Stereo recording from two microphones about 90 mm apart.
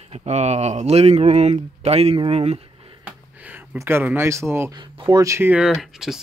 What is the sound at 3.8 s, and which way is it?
Speech, 25° right (ahead or behind).